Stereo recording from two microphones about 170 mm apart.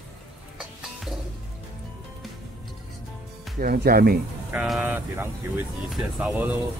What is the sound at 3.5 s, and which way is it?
Speech, 65° right (ahead or behind).